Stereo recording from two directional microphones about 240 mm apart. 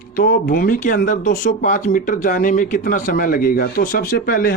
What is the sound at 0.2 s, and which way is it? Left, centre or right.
Speech, left.